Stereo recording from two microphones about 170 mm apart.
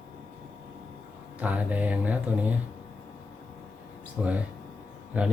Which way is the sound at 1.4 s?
10° right (ahead or behind).